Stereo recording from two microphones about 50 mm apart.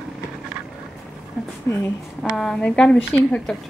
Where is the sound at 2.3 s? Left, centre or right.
Centre.